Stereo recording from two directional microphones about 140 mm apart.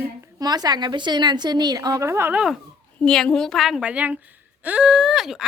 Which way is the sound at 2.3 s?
5° right (ahead or behind).